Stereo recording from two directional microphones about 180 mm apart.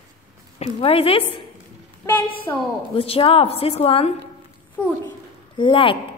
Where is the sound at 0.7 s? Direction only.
30° left (ahead or behind).